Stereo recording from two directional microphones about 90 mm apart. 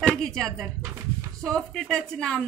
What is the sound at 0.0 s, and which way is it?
A woman's voice, 5° left (ahead or behind).